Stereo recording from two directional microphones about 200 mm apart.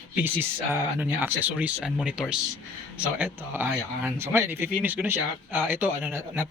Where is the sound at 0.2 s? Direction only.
10° right (ahead or behind).